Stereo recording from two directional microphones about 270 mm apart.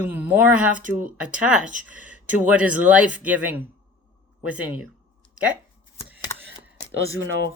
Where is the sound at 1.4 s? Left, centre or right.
Left.